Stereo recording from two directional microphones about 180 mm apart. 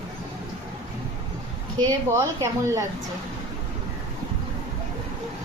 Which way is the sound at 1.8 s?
15° right (ahead or behind).